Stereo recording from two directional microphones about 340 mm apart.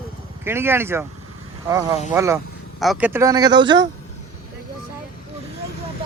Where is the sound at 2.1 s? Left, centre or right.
Centre.